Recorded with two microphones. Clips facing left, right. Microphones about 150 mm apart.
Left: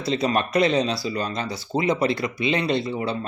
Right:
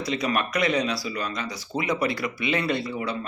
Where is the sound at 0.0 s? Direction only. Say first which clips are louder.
Left 3 dB; 30° left (ahead or behind).